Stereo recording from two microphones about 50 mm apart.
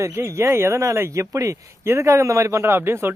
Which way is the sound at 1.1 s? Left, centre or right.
Right.